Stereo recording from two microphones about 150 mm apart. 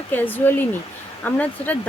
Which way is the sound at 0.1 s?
10° left (ahead or behind).